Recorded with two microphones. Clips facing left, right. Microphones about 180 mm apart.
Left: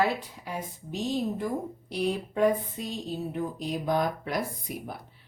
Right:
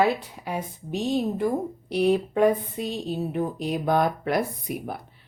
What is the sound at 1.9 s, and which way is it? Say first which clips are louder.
Speech: right 8 dB; 65° right (ahead or behind).